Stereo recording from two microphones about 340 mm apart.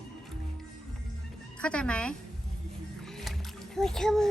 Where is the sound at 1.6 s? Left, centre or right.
Centre.